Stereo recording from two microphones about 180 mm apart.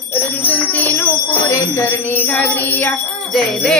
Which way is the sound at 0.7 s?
10° left (ahead or behind).